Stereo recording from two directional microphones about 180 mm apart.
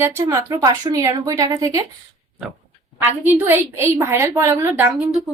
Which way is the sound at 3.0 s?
10° right (ahead or behind).